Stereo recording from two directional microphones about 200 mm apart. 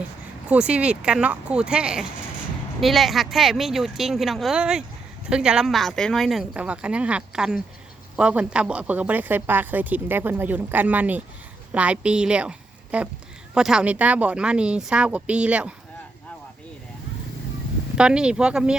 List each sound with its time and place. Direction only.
0.4 s a woman's voice: 5° right (ahead or behind)
17.9 s speech: 5° right (ahead or behind)